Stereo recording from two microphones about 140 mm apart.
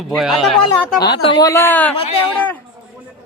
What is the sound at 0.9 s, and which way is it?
Speech, 30° left (ahead or behind).